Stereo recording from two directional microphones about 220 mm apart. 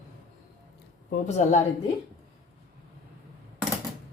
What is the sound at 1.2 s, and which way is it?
Speech, 30° left (ahead or behind).